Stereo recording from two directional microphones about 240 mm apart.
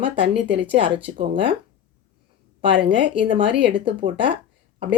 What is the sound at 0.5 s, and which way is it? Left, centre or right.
Speech, right.